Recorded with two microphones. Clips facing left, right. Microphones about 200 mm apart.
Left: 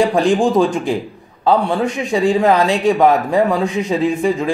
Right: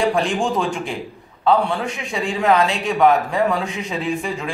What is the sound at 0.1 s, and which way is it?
Speech, 35° left (ahead or behind).